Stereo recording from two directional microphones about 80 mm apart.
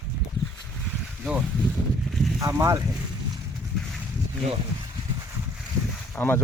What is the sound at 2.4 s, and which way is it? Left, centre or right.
Speech, right.